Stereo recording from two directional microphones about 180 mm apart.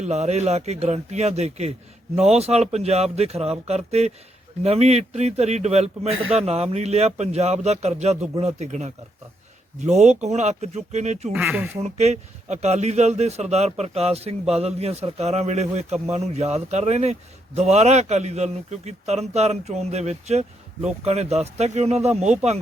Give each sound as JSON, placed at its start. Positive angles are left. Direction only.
{"t": 0.0, "sound": "a man's voice", "side_deg": -40}
{"t": 11.3, "sound": "speech", "side_deg": -5}
{"t": 11.8, "sound": "a man's voice", "side_deg": -35}